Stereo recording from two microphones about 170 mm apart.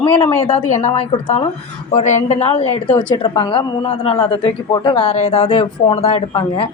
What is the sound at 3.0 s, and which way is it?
A woman's voice, 30° left (ahead or behind).